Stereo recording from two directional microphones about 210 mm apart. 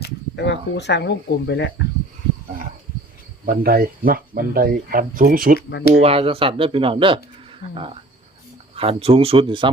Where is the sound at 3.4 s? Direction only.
45° right (ahead or behind).